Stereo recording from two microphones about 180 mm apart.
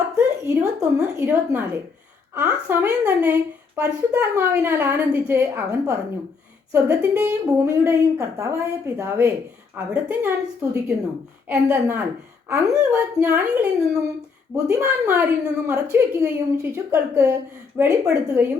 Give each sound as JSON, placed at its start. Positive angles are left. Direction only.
{"t": 0.2, "sound": "a woman's voice", "side_deg": -10}